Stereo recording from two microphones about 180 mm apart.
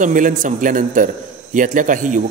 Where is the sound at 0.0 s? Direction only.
45° right (ahead or behind).